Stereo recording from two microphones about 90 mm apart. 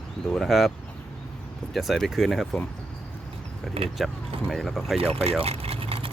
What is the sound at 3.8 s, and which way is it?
Speech, 90° right.